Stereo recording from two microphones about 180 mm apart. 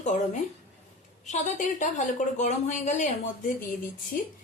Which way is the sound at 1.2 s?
40° left (ahead or behind).